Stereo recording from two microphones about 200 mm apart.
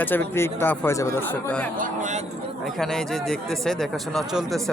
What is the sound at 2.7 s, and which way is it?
Speech, centre (ahead or behind).